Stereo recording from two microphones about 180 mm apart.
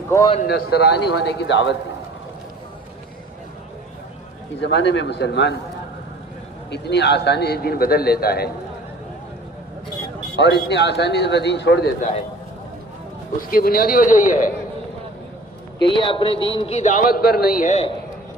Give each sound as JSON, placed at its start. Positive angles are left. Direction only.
{"t": 0.4, "sound": "speech", "side_deg": 60}
{"t": 4.6, "sound": "speech", "side_deg": 75}
{"t": 6.7, "sound": "a man's voice", "side_deg": 70}
{"t": 10.3, "sound": "speech", "side_deg": 70}
{"t": 13.5, "sound": "a man's voice", "side_deg": 55}
{"t": 15.8, "sound": "a man's voice", "side_deg": 25}